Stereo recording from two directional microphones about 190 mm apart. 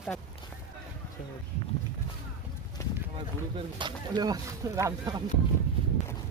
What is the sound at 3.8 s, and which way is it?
Speech, 25° right (ahead or behind).